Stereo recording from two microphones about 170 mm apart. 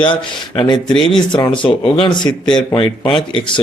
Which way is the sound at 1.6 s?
30° left (ahead or behind).